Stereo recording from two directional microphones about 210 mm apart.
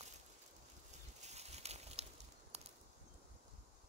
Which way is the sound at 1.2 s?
30° right (ahead or behind).